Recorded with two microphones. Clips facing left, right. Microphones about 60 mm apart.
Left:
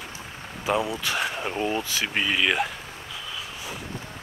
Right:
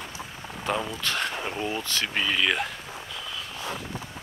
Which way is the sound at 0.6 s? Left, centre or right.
Centre.